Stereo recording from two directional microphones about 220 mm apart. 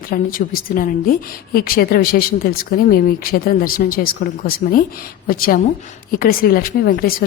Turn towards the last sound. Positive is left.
turn(degrees=40)  # may be behind; listen again after turning